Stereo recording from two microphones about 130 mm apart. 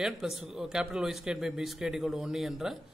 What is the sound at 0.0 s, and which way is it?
Speech, 5° right (ahead or behind).